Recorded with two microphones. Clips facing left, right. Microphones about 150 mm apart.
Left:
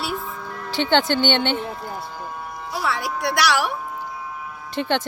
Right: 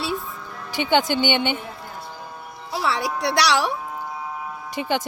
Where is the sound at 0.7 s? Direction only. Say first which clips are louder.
Left 1 dB; 10° right (ahead or behind).